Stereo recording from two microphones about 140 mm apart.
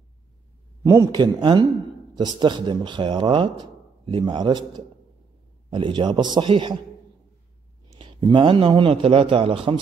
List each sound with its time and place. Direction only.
0.8 s speech: 30° right (ahead or behind)
8.0 s speech: 35° right (ahead or behind)